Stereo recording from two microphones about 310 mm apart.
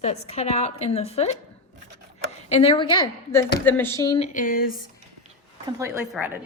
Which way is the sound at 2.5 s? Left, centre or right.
Centre.